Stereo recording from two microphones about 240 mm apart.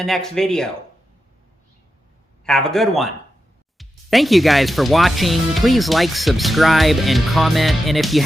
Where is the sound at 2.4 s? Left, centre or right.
Centre.